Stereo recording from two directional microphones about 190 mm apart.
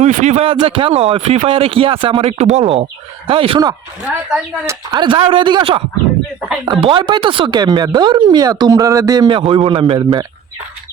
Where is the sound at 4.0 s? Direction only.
5° right (ahead or behind).